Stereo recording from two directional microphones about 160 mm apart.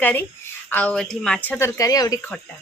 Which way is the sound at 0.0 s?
10° left (ahead or behind).